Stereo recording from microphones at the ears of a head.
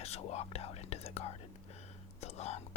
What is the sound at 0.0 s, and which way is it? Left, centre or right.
Speech, left.